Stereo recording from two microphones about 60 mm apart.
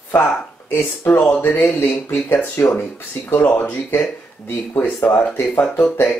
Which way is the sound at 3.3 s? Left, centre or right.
Left.